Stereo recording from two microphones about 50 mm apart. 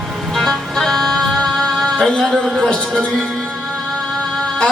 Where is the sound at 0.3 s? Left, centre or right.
Centre.